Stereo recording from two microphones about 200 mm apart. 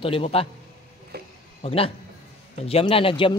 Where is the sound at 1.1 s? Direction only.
50° right (ahead or behind).